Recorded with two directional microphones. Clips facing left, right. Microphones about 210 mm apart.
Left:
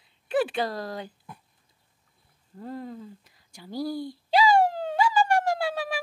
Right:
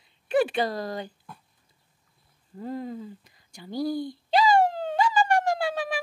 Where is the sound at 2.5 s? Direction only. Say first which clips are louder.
Right 3 dB; centre (ahead or behind).